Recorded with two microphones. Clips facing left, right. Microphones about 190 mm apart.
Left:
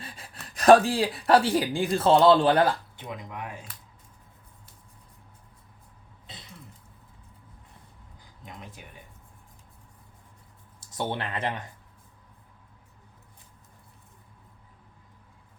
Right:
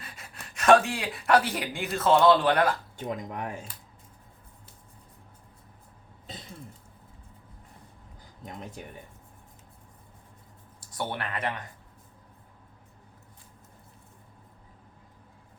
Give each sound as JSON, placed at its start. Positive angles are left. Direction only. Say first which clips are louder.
{"t": 0.0, "sound": "speech", "louder": "left 2 dB", "side_deg": 30}
{"t": 3.0, "sound": "speech", "louder": "right 4 dB", "side_deg": -45}
{"t": 10.8, "sound": "speech", "louder": "left 2 dB", "side_deg": 20}